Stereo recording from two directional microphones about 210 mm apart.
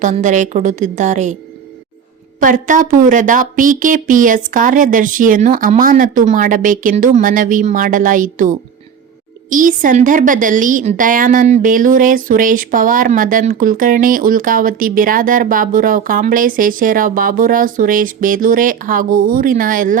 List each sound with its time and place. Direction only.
0.0 s a woman's voice: 35° right (ahead or behind)
2.4 s a woman's voice: 40° right (ahead or behind)